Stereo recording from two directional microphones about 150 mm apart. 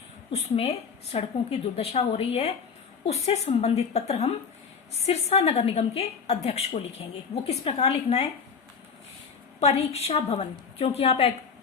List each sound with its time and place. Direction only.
0.3 s a woman's voice: 40° left (ahead or behind)
9.6 s a woman's voice: 45° left (ahead or behind)